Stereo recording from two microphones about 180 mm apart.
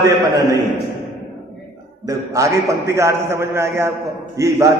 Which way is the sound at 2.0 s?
15° right (ahead or behind).